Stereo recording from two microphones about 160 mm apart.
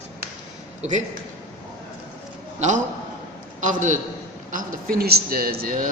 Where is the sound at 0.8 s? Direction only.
50° right (ahead or behind).